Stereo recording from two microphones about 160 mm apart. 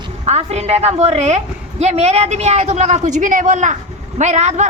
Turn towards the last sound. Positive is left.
turn(degrees=-45)  # may be behind; listen again after turning